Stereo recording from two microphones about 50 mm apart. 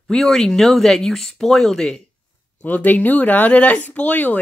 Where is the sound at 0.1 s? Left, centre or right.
Centre.